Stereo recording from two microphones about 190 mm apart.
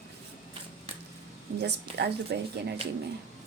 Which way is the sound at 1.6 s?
60° right (ahead or behind).